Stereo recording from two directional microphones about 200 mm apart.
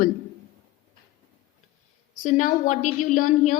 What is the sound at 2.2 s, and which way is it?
A woman's voice, 40° left (ahead or behind).